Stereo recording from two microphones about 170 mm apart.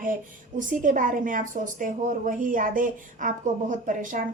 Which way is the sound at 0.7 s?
50° right (ahead or behind).